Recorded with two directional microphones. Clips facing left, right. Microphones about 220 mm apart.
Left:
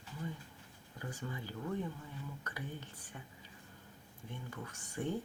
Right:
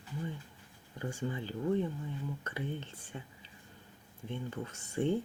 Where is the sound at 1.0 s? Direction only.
25° right (ahead or behind).